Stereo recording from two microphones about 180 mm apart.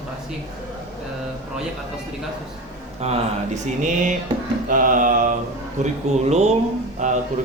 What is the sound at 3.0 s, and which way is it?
Speech, 40° right (ahead or behind).